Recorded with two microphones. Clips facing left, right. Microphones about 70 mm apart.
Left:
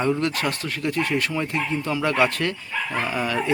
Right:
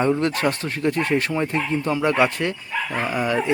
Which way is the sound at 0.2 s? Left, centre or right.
Right.